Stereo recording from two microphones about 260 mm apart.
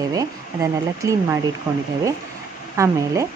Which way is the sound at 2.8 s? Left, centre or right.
Centre.